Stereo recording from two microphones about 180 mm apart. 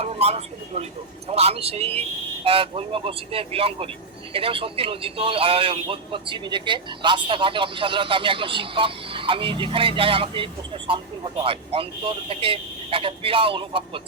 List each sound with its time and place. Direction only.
0.0 s a man's voice: 35° right (ahead or behind)